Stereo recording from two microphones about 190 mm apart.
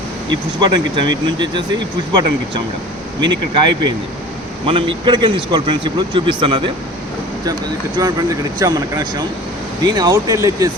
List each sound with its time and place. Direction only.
0.3 s speech: 25° right (ahead or behind)
4.6 s speech: 25° right (ahead or behind)
8.0 s speech: 20° right (ahead or behind)